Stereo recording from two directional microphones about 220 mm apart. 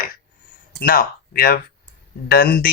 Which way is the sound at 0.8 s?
40° left (ahead or behind).